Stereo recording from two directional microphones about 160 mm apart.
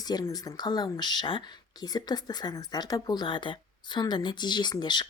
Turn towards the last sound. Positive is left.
turn(degrees=25)  # may be behind; listen again after turning